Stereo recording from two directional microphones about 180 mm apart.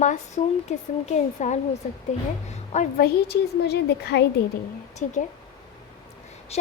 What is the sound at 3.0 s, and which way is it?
A woman's voice, 60° left (ahead or behind).